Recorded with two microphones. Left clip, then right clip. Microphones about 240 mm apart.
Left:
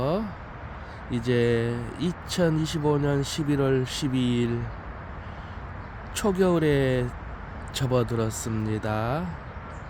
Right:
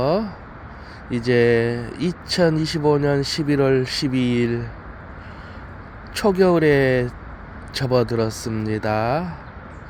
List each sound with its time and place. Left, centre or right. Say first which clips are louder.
0.0 s a sound: right 7 dB; centre
1.1 s speech: right 7 dB; centre
6.1 s speech: right 7 dB; centre